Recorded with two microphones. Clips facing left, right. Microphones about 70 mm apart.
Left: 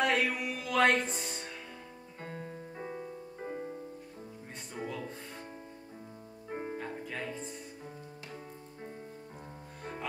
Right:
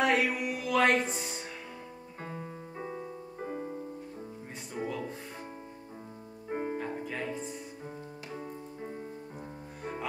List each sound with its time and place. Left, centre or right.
0.0 s music: centre
4.7 s music: centre
6.5 s music: right
6.8 s music: centre